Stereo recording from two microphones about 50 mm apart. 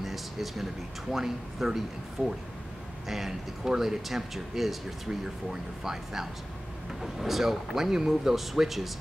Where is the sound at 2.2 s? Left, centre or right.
Right.